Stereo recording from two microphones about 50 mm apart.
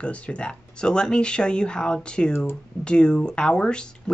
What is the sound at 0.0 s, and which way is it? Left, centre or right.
Speech, left.